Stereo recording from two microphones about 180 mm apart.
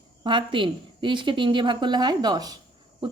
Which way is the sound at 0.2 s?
25° right (ahead or behind).